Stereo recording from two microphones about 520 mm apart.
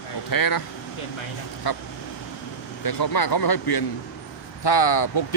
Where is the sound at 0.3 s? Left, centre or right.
Left.